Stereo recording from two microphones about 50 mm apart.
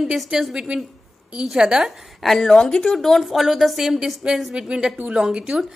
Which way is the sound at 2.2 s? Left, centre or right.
Centre.